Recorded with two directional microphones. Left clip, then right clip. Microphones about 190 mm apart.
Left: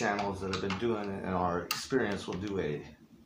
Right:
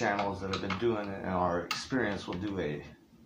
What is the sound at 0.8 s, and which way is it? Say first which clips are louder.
Dishes: right 1 dB; 20° right (ahead or behind).